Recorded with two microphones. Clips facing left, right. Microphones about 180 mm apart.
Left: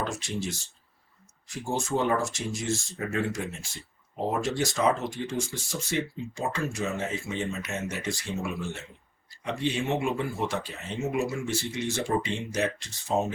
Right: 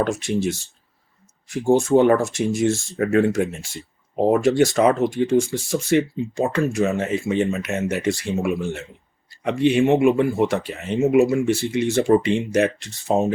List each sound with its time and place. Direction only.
0.0 s speech: 60° right (ahead or behind)
1.5 s speech: 60° right (ahead or behind)